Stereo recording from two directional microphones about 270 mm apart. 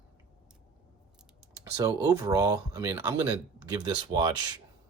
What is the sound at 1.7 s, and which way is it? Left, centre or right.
Speech, centre.